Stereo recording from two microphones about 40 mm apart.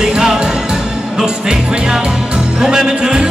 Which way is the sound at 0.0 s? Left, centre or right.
Centre.